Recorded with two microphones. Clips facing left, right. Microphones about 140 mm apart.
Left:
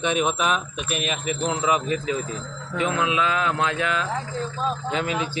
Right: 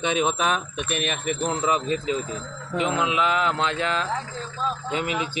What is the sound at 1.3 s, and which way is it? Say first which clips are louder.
Speech: left 1 dB; 40° right (ahead or behind).